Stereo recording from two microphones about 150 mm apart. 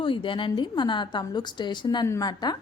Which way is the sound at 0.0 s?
35° left (ahead or behind).